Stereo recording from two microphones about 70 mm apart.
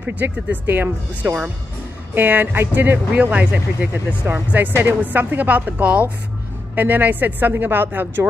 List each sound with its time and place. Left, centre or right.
0.0 s speech: right